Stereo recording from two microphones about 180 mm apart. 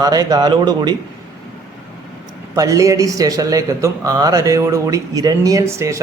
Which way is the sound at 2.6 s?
20° right (ahead or behind).